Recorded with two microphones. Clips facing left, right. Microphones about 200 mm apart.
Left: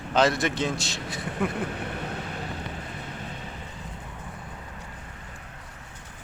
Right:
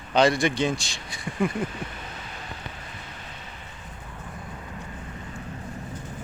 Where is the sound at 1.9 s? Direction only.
60° left (ahead or behind).